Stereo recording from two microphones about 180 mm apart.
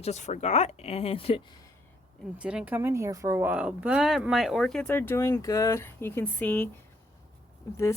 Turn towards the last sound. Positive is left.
turn(degrees=15)  # may be behind; listen again after turning